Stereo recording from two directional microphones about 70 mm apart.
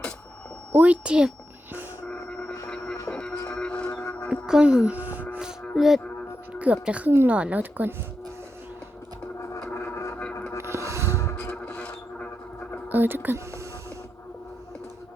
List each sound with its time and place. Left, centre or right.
0.7 s speech: right
2.0 s a sound: centre
2.6 s music: centre
4.3 s speech: centre
5.7 s music: centre
6.8 s a woman's voice: centre
9.4 s music: left
9.7 s a sound: left
10.6 s music: right
11.1 s music: left
11.3 s a sound: centre
12.9 s a sound: right